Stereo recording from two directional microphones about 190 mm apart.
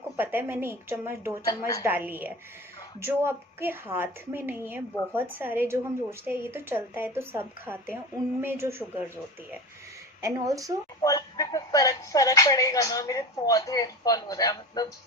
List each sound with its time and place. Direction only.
0.2 s a woman's voice: 10° right (ahead or behind)
1.5 s speech: 20° left (ahead or behind)
1.8 s a woman's voice: 10° right (ahead or behind)
10.2 s a woman's voice: 15° right (ahead or behind)
11.0 s speech: 20° left (ahead or behind)